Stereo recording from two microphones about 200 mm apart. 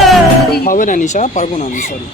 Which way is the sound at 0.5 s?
45° left (ahead or behind).